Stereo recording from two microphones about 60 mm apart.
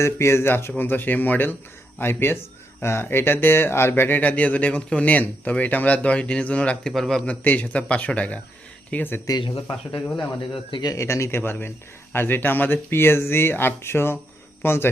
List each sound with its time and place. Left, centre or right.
0.0 s speech: left
4.2 s speech: left
6.8 s a man's voice: centre
7.3 s speech: left
9.2 s speech: left
10.9 s speech: left